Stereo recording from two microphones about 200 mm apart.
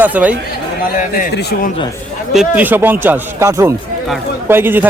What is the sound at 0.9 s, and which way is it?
Speech, 45° left (ahead or behind).